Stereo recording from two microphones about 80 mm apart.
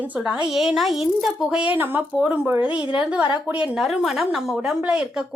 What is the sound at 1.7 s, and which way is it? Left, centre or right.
Speech, right.